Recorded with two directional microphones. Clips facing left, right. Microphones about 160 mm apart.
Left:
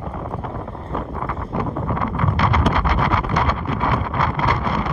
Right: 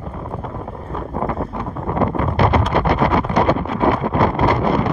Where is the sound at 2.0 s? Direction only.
30° right (ahead or behind).